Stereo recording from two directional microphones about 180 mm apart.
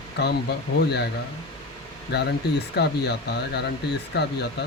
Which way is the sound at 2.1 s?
65° left (ahead or behind).